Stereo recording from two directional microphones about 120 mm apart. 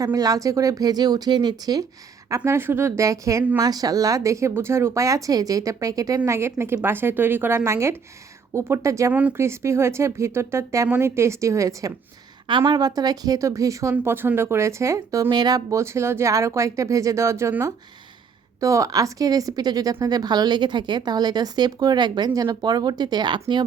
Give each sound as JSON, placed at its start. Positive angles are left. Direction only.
{"t": 0.0, "sound": "a woman's voice", "side_deg": -30}
{"t": 2.3, "sound": "speech", "side_deg": -25}
{"t": 12.5, "sound": "a woman's voice", "side_deg": -45}